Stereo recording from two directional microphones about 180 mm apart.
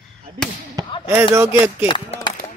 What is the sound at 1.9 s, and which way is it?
Speech, 30° left (ahead or behind).